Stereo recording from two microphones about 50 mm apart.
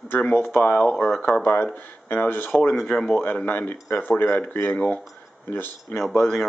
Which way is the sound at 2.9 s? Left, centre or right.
Centre.